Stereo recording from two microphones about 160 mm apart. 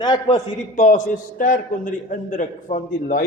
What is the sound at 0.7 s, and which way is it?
A man's voice, 50° left (ahead or behind).